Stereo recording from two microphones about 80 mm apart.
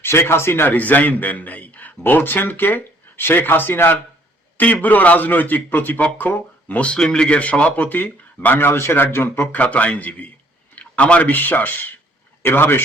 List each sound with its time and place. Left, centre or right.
0.0 s a man's voice: left